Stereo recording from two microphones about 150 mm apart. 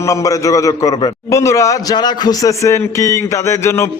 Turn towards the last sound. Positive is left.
turn(degrees=15)  # may be behind; listen again after turning